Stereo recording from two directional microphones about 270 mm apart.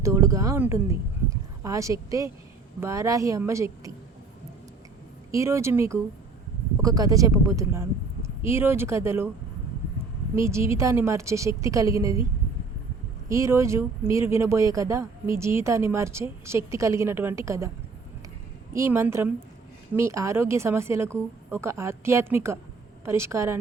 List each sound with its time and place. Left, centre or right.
0.0 s speech: centre
5.3 s speech: centre
10.3 s speech: centre
13.2 s speech: centre
18.7 s speech: centre